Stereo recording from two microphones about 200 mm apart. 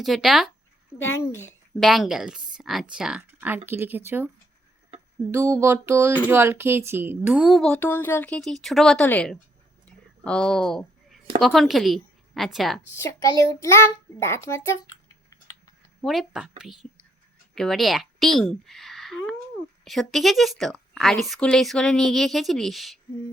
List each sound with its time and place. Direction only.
0.0 s speech: centre (ahead or behind)
1.8 s speech: centre (ahead or behind)
3.7 s music: 10° right (ahead or behind)
5.3 s music: 10° right (ahead or behind)
6.2 s speech: 10° right (ahead or behind); by 9.4 s 5° left (ahead or behind)
9.8 s a sound: 5° left (ahead or behind)
11.4 s a woman's voice: centre (ahead or behind)
13.0 s child singing: 15° left (ahead or behind)
16.0 s a woman's voice: centre (ahead or behind)